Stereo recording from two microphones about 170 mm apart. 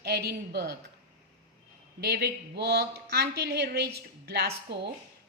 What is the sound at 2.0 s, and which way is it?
A woman's voice, 75° right (ahead or behind).